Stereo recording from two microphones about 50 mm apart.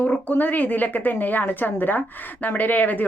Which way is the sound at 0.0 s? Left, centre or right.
Left.